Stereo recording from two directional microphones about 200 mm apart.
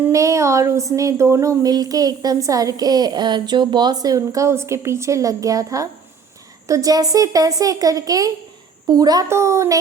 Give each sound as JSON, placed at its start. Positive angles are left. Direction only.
{"t": 0.0, "sound": "speech", "side_deg": -15}